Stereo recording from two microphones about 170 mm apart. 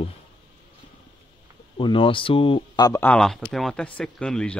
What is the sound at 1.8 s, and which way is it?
Speech, 30° left (ahead or behind).